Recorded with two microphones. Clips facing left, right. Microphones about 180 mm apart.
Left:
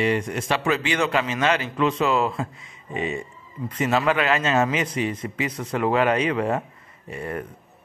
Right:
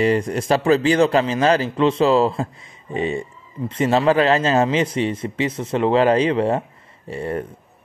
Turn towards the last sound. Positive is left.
turn(degrees=-30)  # may be behind; listen again after turning